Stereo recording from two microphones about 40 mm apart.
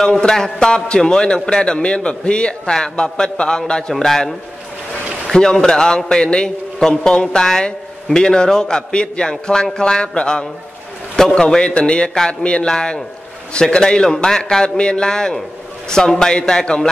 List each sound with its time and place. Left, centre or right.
0.3 s a man's voice: centre
0.7 s a man's voice: left
3.9 s a man's voice: centre